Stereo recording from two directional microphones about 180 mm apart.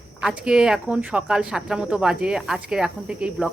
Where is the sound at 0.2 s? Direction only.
5° right (ahead or behind).